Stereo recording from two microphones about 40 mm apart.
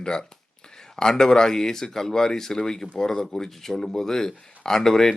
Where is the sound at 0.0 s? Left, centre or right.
Left.